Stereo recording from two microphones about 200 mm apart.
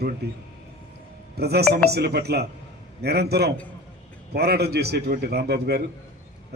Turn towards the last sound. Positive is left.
turn(degrees=-55)  # may be behind; listen again after turning